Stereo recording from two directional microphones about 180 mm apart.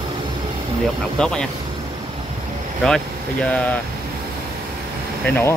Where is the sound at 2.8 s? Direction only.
5° left (ahead or behind).